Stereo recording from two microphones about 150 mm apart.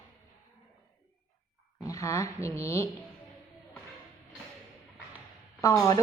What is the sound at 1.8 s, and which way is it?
A woman's voice, 20° left (ahead or behind).